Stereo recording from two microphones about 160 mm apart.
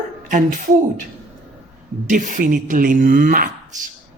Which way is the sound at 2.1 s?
55° right (ahead or behind).